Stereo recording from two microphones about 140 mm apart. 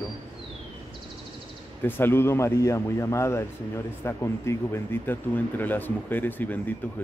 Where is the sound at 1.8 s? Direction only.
15° left (ahead or behind).